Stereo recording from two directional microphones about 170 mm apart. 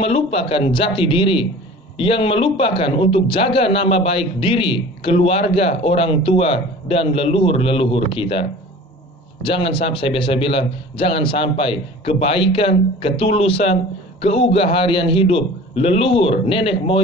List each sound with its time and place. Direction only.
0.0 s a man's voice: 35° left (ahead or behind)